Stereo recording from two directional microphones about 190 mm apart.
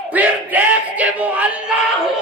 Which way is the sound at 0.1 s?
10° right (ahead or behind).